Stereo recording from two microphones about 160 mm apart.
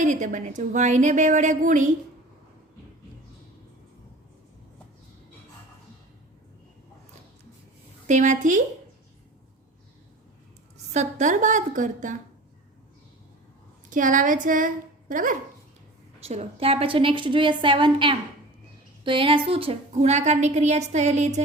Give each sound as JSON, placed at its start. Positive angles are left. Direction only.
{"t": 0.0, "sound": "a woman's voice", "side_deg": -50}
{"t": 8.0, "sound": "a woman's voice", "side_deg": -50}
{"t": 10.9, "sound": "a woman's voice", "side_deg": -50}
{"t": 13.9, "sound": "speech", "side_deg": -55}
{"t": 16.2, "sound": "a woman's voice", "side_deg": -40}